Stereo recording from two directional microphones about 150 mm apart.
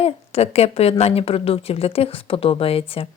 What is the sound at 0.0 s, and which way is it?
A woman's voice, 45° left (ahead or behind).